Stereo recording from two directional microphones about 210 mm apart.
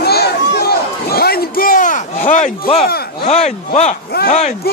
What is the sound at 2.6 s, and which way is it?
Speech, 25° left (ahead or behind).